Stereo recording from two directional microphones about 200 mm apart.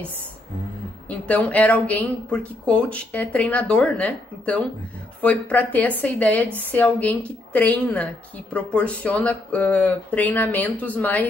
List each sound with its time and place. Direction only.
1.1 s speech: 5° left (ahead or behind)